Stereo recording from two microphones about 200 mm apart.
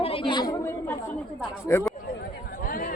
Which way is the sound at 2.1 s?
50° left (ahead or behind).